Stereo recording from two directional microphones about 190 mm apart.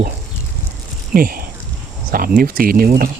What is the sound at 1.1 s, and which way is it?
Speech, 50° right (ahead or behind).